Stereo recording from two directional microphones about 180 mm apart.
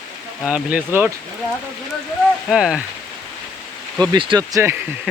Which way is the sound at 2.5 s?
5° right (ahead or behind).